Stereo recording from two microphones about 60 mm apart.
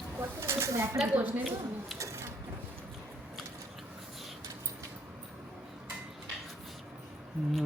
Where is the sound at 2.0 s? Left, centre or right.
Right.